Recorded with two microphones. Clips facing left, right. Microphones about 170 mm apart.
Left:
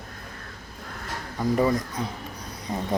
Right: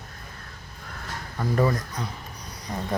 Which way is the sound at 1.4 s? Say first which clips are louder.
Left 1 dB; 15° left (ahead or behind).